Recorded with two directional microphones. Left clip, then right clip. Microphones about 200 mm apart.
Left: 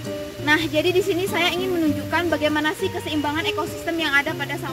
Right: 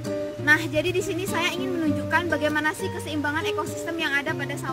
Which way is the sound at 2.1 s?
20° right (ahead or behind).